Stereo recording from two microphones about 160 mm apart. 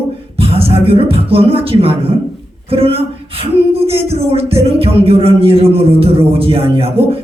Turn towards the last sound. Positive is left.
turn(degrees=-35)  # may be behind; listen again after turning